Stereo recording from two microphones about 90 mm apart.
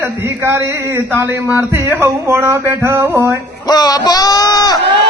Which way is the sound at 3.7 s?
50° left (ahead or behind).